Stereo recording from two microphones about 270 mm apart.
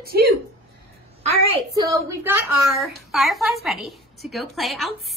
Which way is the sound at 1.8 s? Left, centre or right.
Centre.